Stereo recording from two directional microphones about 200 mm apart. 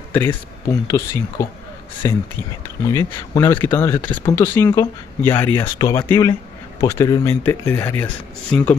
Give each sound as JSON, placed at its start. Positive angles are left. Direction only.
{"t": 0.1, "sound": "speech", "side_deg": 15}